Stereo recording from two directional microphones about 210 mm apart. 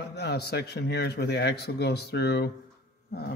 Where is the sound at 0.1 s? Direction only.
50° left (ahead or behind).